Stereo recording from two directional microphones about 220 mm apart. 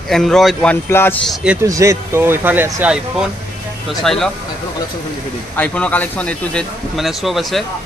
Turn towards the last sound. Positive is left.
turn(degrees=0)  # may be behind; listen again after turning